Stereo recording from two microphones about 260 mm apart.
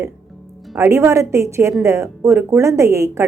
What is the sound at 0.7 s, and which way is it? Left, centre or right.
A woman's voice, centre.